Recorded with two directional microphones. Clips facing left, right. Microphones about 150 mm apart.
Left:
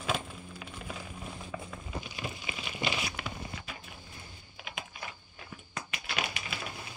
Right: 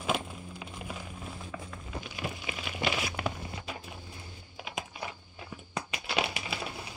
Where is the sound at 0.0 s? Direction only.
15° right (ahead or behind).